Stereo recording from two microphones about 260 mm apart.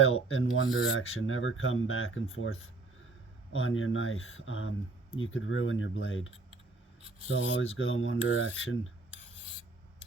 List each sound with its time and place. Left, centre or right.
0.3 s speech: left
7.5 s speech: left